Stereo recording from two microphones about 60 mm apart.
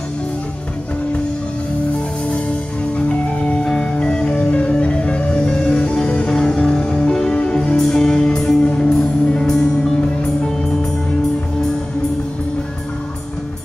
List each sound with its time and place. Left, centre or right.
3.1 s music: centre